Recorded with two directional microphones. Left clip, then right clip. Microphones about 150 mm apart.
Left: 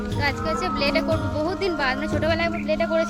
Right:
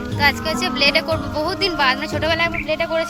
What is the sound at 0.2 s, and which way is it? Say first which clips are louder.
Speech: right 6 dB; 10° right (ahead or behind).